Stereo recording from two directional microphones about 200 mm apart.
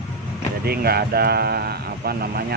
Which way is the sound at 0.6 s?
50° right (ahead or behind).